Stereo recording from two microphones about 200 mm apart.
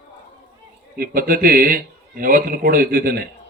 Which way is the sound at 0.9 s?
45° right (ahead or behind).